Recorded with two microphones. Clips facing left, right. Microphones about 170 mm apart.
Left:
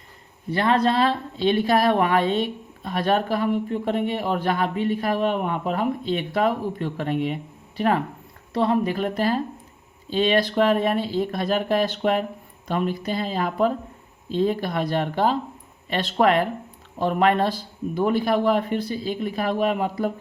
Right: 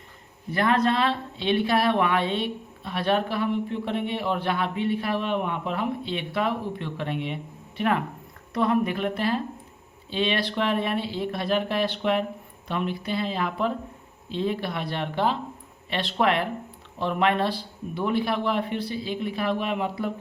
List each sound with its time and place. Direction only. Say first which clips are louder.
0.5 s speech: left 2 dB; 30° left (ahead or behind)